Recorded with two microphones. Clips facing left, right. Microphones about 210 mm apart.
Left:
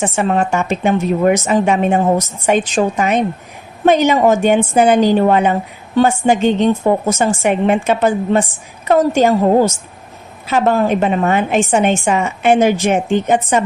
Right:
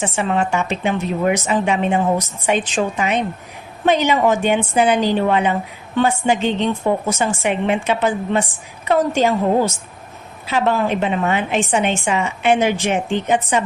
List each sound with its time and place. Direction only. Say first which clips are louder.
0.0 s a woman's voice: left 4 dB; 45° left (ahead or behind)